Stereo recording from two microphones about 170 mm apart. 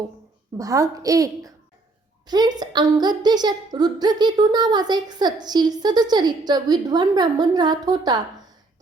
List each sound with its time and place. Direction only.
0.5 s a woman's voice: 20° right (ahead or behind)